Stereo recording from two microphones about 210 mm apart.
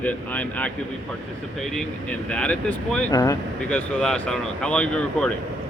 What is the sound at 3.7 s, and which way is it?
Speech, 5° left (ahead or behind).